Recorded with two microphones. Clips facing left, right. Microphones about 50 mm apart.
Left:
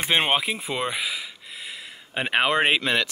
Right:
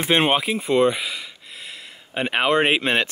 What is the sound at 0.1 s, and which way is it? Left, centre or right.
Speech, centre.